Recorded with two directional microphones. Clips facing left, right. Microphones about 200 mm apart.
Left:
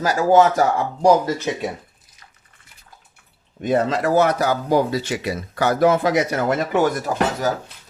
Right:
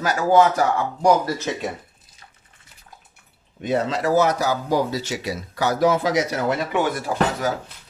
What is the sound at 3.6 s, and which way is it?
Speech, 50° left (ahead or behind).